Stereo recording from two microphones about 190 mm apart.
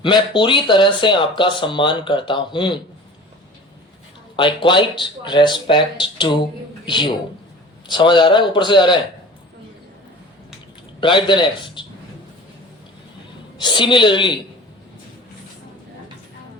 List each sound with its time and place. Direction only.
0.0 s speech: 25° left (ahead or behind)
4.4 s speech: 25° left (ahead or behind)
11.0 s speech: 25° left (ahead or behind)
13.6 s speech: 25° left (ahead or behind)